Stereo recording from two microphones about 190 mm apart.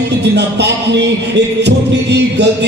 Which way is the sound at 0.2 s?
60° right (ahead or behind).